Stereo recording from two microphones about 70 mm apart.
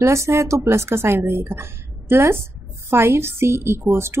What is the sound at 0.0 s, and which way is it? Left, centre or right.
A woman's voice, right.